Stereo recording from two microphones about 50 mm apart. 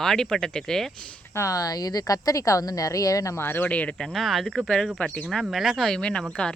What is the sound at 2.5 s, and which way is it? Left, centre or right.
Speech, left.